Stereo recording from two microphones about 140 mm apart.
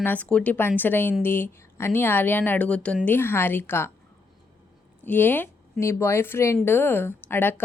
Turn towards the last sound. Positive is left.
turn(degrees=15)  # may be behind; listen again after turning